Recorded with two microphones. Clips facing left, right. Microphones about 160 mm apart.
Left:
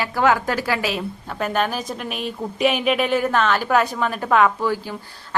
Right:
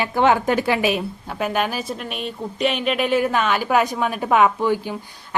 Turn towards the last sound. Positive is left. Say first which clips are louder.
# right 1 dB
turn(degrees=-15)  # may be behind; listen again after turning